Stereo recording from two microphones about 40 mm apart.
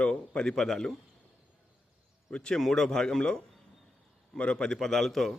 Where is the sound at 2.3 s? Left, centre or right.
Centre.